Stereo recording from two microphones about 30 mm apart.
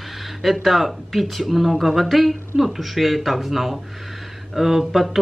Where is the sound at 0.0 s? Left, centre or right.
Centre.